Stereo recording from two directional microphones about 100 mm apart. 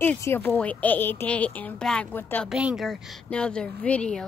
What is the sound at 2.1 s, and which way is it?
Speech, 20° left (ahead or behind).